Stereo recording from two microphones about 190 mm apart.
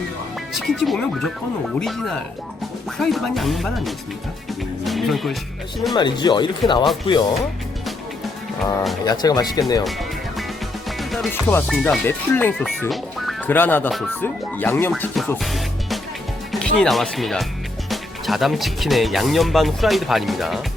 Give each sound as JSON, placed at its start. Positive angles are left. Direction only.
{"t": 0.5, "sound": "speech", "side_deg": 0}
{"t": 5.9, "sound": "speech", "side_deg": 25}
{"t": 9.0, "sound": "speech", "side_deg": 20}
{"t": 9.8, "sound": "music", "side_deg": 0}
{"t": 10.8, "sound": "speech", "side_deg": 0}
{"t": 15.4, "sound": "music", "side_deg": 0}
{"t": 16.5, "sound": "speech", "side_deg": 5}